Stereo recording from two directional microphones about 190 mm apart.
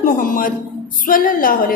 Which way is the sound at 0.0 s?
45° left (ahead or behind).